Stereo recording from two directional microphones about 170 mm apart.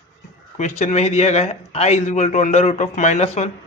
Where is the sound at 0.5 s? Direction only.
45° left (ahead or behind).